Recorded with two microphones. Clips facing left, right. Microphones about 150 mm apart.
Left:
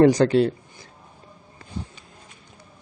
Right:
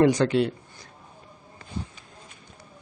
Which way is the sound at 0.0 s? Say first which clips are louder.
Left 4 dB; 35° left (ahead or behind).